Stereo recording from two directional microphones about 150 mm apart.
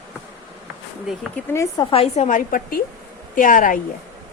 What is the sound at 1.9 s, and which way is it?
A woman's voice, 45° left (ahead or behind).